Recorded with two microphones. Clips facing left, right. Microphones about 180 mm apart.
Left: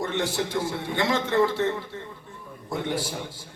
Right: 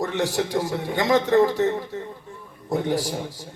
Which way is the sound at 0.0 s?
40° right (ahead or behind).